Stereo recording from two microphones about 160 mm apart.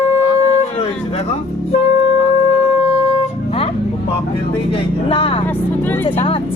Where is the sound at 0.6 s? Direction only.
40° left (ahead or behind).